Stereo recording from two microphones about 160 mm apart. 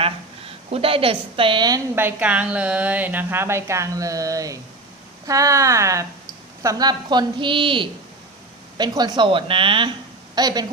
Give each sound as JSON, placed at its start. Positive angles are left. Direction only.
{"t": 0.0, "sound": "a woman's voice", "side_deg": -35}
{"t": 2.0, "sound": "a woman's voice", "side_deg": -10}